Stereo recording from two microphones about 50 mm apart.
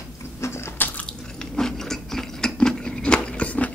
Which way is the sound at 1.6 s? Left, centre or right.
Centre.